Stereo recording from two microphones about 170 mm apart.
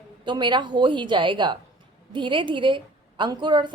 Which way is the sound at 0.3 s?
25° right (ahead or behind).